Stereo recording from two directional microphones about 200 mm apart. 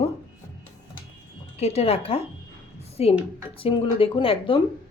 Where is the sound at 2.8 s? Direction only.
30° left (ahead or behind).